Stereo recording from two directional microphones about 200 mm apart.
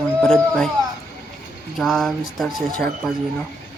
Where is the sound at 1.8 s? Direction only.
Centre (ahead or behind).